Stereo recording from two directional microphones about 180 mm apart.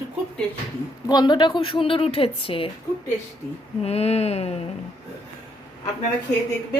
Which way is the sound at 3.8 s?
35° left (ahead or behind).